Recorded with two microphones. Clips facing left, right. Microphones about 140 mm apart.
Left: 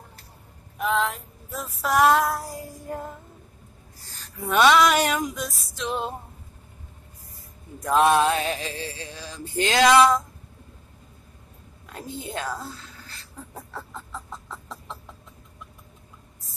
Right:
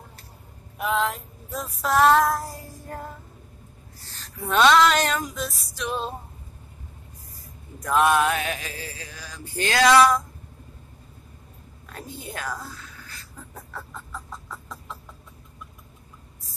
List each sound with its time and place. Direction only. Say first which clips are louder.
0.7 s female singing: even; centre (ahead or behind)
4.2 s female singing: even; 10° left (ahead or behind)
7.8 s music: left 1 dB; 30° left (ahead or behind)
11.9 s speech: left 3 dB; 20° left (ahead or behind)
13.7 s chicken: even; 25° left (ahead or behind)